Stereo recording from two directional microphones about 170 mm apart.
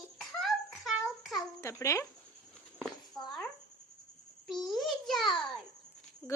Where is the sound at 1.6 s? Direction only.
15° left (ahead or behind).